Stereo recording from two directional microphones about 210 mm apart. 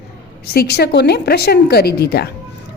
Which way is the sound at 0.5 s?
50° left (ahead or behind).